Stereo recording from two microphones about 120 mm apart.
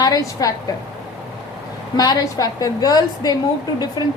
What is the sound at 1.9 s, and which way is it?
A woman's voice, 30° left (ahead or behind).